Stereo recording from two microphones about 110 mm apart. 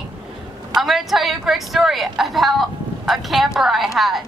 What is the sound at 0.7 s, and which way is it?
A woman's voice, centre (ahead or behind).